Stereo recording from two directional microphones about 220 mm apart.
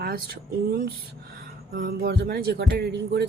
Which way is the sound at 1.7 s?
45° right (ahead or behind).